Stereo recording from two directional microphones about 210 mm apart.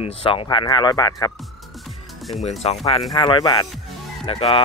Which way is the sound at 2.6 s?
30° left (ahead or behind).